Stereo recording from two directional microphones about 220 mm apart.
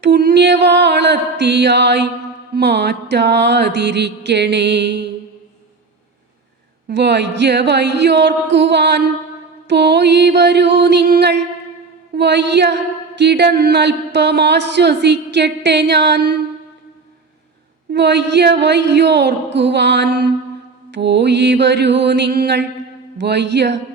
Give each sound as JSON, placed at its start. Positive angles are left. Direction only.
{"t": 0.0, "sound": "speech", "side_deg": -50}
{"t": 6.8, "sound": "speech", "side_deg": -50}
{"t": 17.9, "sound": "speech", "side_deg": -50}